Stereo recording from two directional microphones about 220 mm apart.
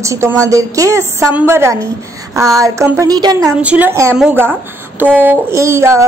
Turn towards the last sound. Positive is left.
turn(degrees=-10)  # may be behind; listen again after turning